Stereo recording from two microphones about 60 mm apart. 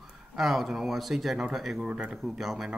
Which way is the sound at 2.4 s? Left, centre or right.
Centre.